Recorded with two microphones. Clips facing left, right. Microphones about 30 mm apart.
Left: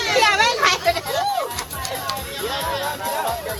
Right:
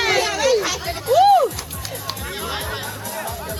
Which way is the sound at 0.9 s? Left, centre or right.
Left.